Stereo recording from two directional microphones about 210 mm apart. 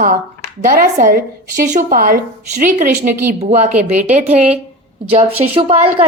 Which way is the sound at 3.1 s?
10° right (ahead or behind).